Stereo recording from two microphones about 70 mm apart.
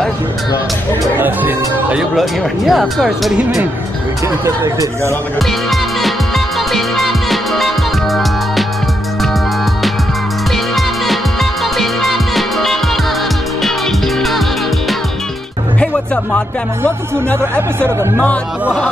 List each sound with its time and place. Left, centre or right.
1.1 s speech: right
2.0 s speech: centre
4.5 s speech: right
5.7 s music: centre
10.5 s music: centre
15.8 s music: centre
17.6 s speech: right
18.2 s speech: centre